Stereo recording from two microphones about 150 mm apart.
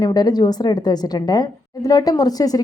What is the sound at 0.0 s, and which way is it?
Speech, 25° left (ahead or behind).